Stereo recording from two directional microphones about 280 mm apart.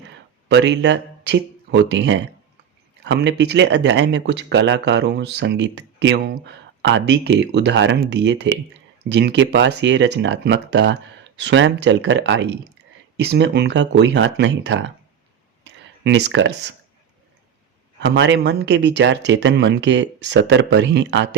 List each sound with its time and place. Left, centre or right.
0.4 s speech: right
15.6 s a sound: right
18.0 s speech: right